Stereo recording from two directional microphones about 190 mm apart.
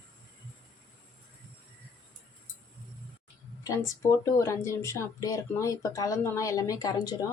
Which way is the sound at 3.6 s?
15° left (ahead or behind).